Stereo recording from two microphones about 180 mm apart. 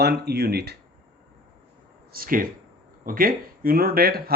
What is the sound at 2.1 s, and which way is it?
Speech, 50° right (ahead or behind).